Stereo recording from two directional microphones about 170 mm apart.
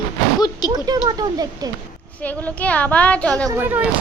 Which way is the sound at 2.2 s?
10° left (ahead or behind).